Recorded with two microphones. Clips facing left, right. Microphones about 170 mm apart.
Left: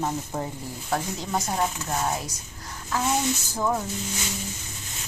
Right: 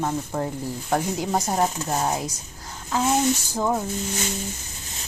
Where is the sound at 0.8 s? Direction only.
10° right (ahead or behind).